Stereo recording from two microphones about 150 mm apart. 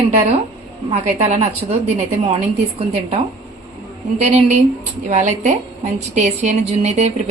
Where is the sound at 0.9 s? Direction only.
45° right (ahead or behind).